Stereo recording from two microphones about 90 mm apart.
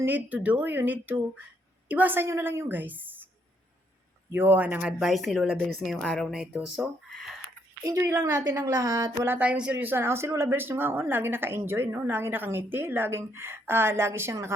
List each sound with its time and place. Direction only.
0.0 s speech: 20° right (ahead or behind)
4.3 s a woman's voice: 20° right (ahead or behind); by 7.3 s centre (ahead or behind)
7.9 s a woman's voice: 35° right (ahead or behind)
9.1 s speech: 25° right (ahead or behind)